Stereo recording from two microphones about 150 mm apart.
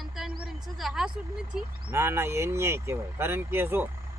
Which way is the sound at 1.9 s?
15° right (ahead or behind).